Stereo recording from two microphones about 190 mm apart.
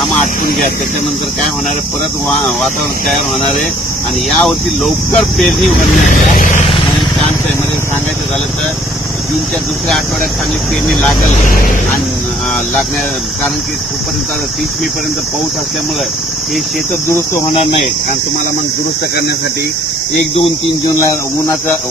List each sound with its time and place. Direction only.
2.2 s speech: centre (ahead or behind)
4.3 s speech: centre (ahead or behind)
6.0 s speech: 40° left (ahead or behind)
10.9 s speech: 5° left (ahead or behind)
11.3 s speech: 45° left (ahead or behind)